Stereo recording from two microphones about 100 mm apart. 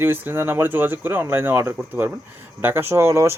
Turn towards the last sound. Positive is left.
turn(degrees=-30)  # may be behind; listen again after turning